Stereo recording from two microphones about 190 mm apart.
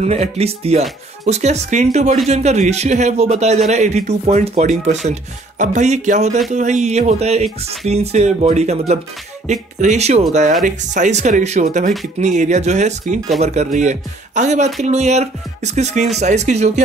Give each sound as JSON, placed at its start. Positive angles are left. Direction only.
{"t": 0.0, "sound": "a man's voice", "side_deg": -35}